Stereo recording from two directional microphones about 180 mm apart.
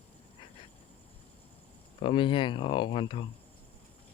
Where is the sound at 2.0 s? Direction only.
30° left (ahead or behind).